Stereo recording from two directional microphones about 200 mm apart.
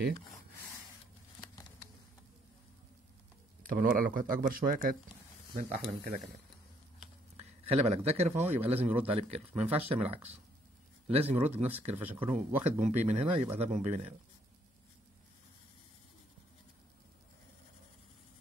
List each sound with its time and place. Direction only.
1.4 s a sound: 20° left (ahead or behind)
3.6 s speech: 45° right (ahead or behind)
7.6 s a man's voice: 30° right (ahead or behind)